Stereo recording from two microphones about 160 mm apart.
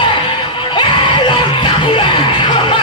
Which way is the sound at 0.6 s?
30° left (ahead or behind).